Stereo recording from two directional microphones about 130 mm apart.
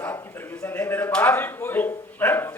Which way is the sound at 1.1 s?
10° left (ahead or behind).